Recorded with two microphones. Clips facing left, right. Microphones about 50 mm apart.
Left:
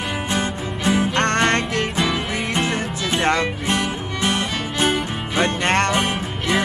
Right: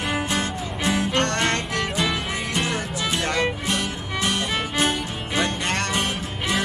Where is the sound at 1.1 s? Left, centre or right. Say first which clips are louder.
Left 4 dB; left.